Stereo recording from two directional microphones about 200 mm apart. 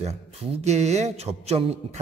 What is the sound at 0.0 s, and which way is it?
A man's voice, 30° right (ahead or behind).